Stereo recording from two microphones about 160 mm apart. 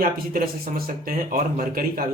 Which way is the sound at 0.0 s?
60° right (ahead or behind).